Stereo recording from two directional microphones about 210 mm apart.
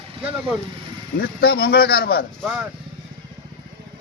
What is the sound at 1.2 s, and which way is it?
A man's voice, 50° left (ahead or behind).